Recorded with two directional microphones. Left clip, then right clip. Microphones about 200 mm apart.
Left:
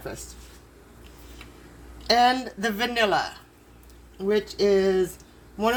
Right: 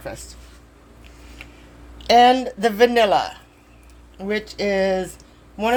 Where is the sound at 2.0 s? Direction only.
45° right (ahead or behind).